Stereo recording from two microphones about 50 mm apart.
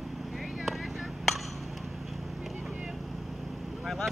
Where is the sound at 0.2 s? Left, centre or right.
Centre.